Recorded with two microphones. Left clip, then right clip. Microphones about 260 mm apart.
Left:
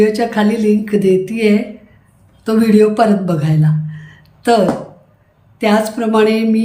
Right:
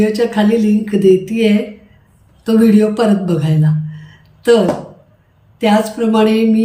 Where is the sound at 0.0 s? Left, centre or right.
Centre.